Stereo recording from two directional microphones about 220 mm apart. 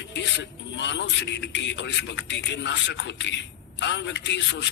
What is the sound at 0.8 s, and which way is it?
A man's voice, 55° left (ahead or behind).